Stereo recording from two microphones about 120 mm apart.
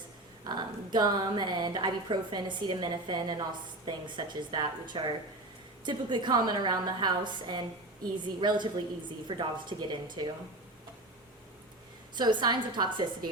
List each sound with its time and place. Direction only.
0.4 s a woman's voice: 40° right (ahead or behind)
12.1 s a woman's voice: 40° right (ahead or behind)